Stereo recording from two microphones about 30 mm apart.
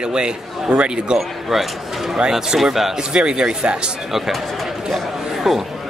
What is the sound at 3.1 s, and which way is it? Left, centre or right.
Speech, right.